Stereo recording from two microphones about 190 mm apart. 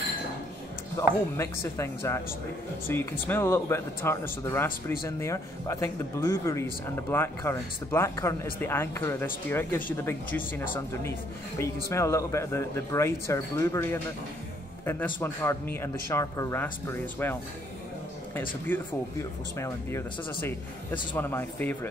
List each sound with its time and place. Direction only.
0.9 s speech: 15° left (ahead or behind)
18.7 s speech: 10° left (ahead or behind)